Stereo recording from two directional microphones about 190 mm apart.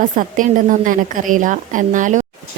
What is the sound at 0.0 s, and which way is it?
A woman's voice, 45° right (ahead or behind).